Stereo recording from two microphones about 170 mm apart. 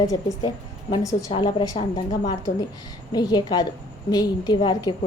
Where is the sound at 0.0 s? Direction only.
20° left (ahead or behind).